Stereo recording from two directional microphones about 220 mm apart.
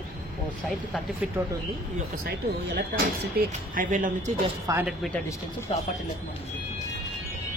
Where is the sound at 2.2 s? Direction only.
50° right (ahead or behind).